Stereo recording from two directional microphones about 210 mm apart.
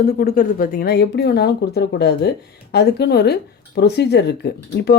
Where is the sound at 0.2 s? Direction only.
45° left (ahead or behind).